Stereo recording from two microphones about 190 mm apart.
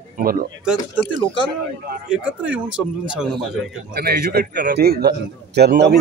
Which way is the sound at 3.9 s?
55° right (ahead or behind).